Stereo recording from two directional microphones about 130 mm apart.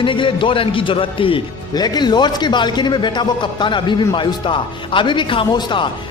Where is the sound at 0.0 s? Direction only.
40° left (ahead or behind).